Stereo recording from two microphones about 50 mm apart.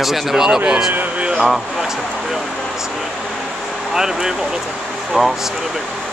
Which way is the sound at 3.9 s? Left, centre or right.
Centre.